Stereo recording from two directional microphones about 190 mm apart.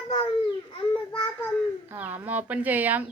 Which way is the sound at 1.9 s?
10° right (ahead or behind).